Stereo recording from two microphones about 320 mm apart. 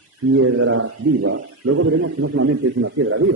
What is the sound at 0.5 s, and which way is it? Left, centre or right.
A man's voice, right.